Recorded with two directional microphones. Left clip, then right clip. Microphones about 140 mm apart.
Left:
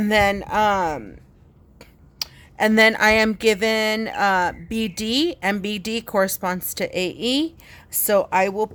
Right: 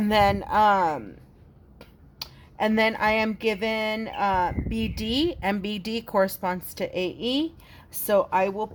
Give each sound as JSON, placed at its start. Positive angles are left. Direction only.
{"t": 0.0, "sound": "speech", "side_deg": 25}
{"t": 2.1, "sound": "speech", "side_deg": 35}